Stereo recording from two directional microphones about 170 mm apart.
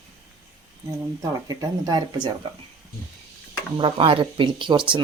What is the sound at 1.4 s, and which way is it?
Speech, 25° right (ahead or behind).